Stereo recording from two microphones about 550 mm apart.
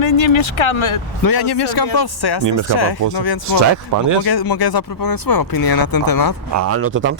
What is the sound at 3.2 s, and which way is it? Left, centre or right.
Speech, left.